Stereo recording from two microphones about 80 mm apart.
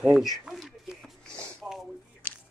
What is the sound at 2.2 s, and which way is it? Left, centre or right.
Biting, left.